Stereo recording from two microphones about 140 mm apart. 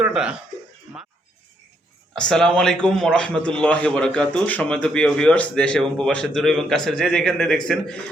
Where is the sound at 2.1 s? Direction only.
5° left (ahead or behind).